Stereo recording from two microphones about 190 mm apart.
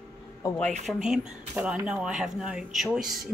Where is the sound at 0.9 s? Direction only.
5° right (ahead or behind).